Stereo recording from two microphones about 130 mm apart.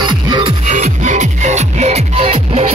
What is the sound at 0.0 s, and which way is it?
Music, 35° right (ahead or behind).